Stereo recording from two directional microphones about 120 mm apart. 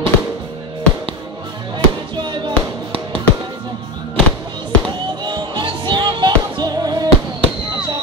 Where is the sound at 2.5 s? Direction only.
50° right (ahead or behind).